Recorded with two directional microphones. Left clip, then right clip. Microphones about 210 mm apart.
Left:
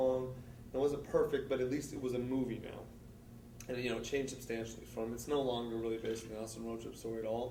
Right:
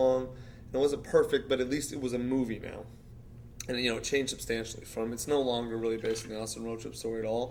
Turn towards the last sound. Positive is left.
turn(degrees=-40)  # may be behind; listen again after turning